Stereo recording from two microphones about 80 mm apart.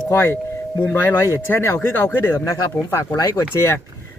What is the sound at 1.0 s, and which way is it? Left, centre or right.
Speech, left.